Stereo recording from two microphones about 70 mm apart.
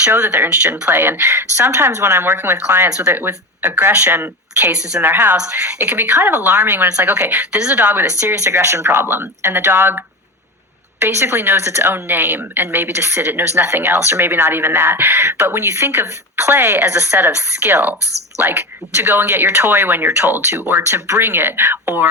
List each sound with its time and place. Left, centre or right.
0.2 s speech: centre
0.9 s speech: right
1.3 s speech: right
3.9 s a woman's voice: centre
5.0 s a woman's voice: right
5.4 s a woman's voice: centre
8.4 s speech: right
11.0 s a woman's voice: right
20.8 s speech: right
21.2 s speech: right